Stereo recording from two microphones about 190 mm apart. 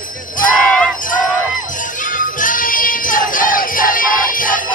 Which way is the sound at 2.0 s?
45° left (ahead or behind).